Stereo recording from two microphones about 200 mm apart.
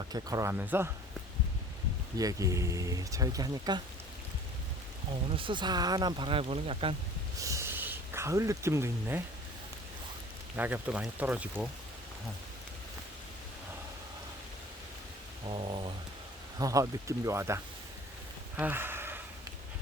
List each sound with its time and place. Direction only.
0.1 s speech: 15° right (ahead or behind)
2.1 s speech: 15° right (ahead or behind)
5.4 s speech: 25° right (ahead or behind)
7.4 s speech: 15° right (ahead or behind)
10.6 s speech: 10° right (ahead or behind)
15.4 s speech: 25° right (ahead or behind)
18.5 s gasp: 10° right (ahead or behind)